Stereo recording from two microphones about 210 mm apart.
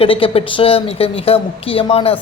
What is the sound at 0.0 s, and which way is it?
A woman's voice, 25° left (ahead or behind).